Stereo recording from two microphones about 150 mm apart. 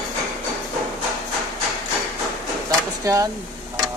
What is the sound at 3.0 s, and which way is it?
Speech, 20° right (ahead or behind).